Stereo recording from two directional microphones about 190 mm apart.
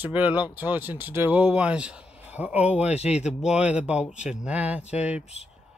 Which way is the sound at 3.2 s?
5° right (ahead or behind).